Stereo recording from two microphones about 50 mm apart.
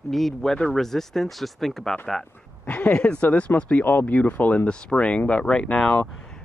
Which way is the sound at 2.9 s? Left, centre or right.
Left.